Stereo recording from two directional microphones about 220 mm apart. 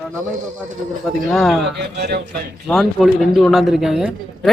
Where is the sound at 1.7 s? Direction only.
50° right (ahead or behind).